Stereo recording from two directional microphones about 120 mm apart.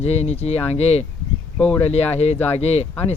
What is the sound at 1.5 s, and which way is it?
Speech, 10° left (ahead or behind).